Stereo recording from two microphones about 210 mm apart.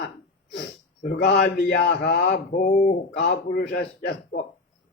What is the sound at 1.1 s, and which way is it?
Speech, 50° left (ahead or behind).